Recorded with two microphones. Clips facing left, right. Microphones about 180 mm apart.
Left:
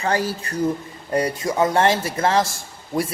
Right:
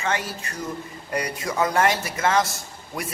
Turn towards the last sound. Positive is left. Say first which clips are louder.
# left 8 dB
turn(degrees=30)  # may be behind; listen again after turning